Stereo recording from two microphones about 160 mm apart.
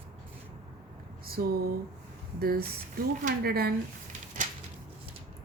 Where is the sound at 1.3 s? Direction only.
70° right (ahead or behind).